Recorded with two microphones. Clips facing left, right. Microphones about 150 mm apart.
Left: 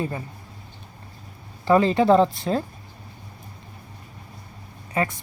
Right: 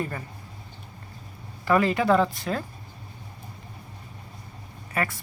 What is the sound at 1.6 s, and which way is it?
Speech, 25° left (ahead or behind).